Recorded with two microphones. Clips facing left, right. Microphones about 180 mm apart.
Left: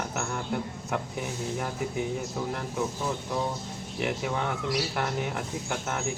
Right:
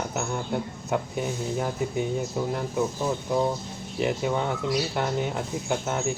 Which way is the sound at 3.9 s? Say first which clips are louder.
Right 4 dB; 20° right (ahead or behind).